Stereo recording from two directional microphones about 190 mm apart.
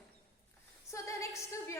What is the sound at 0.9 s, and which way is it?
Speech, 15° left (ahead or behind).